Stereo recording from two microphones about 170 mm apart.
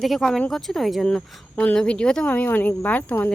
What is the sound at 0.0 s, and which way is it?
Speech, centre (ahead or behind).